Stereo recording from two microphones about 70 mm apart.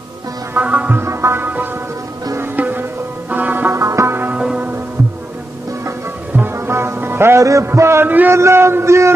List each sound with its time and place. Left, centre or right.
0.6 s music: right
0.9 s speech: right
1.4 s music: right
3.7 s music: right
4.4 s music: centre
6.5 s music: right
7.7 s speech: right